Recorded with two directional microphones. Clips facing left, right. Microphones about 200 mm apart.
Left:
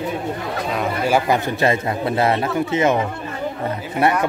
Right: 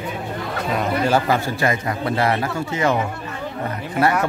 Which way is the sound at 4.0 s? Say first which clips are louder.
Left 1 dB; centre (ahead or behind).